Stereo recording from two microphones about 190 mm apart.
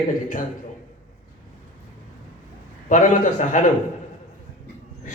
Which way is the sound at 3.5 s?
40° left (ahead or behind).